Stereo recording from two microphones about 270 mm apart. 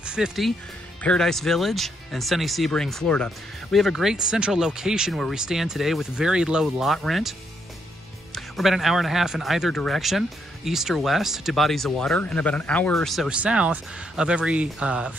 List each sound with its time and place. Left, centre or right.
0.0 s speech: centre
8.4 s speech: centre